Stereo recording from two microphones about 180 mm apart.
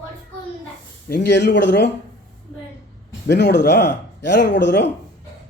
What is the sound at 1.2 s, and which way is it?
Speech, 70° left (ahead or behind).